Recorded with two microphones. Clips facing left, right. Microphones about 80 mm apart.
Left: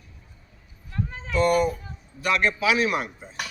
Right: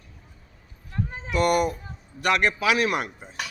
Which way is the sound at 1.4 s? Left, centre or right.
Right.